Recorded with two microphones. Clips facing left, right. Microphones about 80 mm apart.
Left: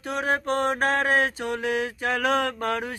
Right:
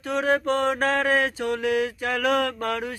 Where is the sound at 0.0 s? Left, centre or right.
Centre.